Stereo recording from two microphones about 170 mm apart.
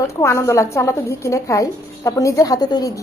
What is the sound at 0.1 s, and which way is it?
A woman's voice, 15° left (ahead or behind).